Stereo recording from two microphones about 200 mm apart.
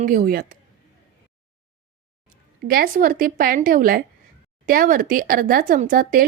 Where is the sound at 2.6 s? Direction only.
45° right (ahead or behind).